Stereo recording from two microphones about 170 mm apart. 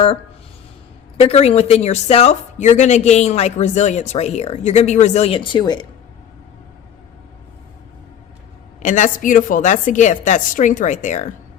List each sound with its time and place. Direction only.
1.1 s speech: 35° left (ahead or behind)
8.8 s a woman's voice: 45° left (ahead or behind)